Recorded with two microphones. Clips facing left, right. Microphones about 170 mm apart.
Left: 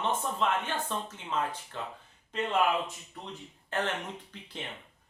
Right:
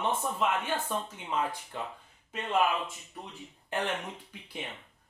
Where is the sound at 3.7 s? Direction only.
15° right (ahead or behind).